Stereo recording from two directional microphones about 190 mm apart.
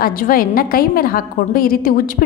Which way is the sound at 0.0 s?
50° left (ahead or behind).